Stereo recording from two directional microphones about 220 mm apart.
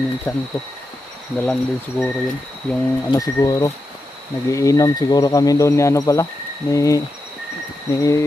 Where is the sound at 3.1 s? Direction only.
15° left (ahead or behind).